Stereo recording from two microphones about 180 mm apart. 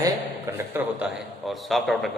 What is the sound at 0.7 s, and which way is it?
A man's voice, 5° right (ahead or behind).